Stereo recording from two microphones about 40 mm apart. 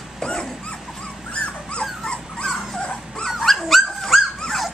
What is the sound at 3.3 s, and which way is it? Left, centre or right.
Dog, centre.